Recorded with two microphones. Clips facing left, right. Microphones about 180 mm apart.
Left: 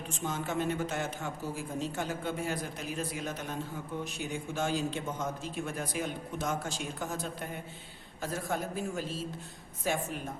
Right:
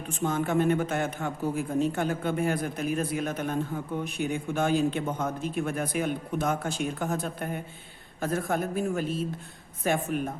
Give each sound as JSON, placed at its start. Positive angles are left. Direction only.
{"t": 0.1, "sound": "a man's voice", "side_deg": -55}